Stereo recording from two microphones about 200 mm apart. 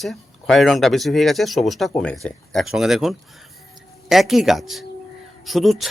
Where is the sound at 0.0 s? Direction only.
Centre (ahead or behind).